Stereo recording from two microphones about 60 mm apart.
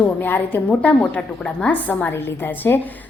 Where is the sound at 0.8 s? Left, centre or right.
Left.